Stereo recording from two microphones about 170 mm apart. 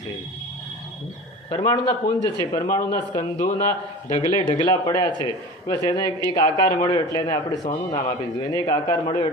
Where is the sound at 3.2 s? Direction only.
50° left (ahead or behind).